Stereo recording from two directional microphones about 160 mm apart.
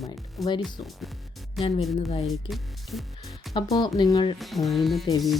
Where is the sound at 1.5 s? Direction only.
40° left (ahead or behind).